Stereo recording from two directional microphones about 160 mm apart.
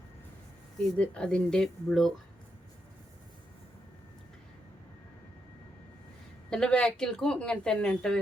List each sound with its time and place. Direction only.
0.9 s speech: 5° left (ahead or behind)
6.5 s speech: 5° left (ahead or behind)